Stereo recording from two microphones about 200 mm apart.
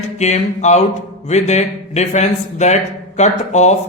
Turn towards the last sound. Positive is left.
turn(degrees=35)  # may be behind; listen again after turning